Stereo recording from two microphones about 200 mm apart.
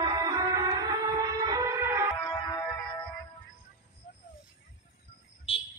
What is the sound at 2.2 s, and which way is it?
Music, 20° left (ahead or behind).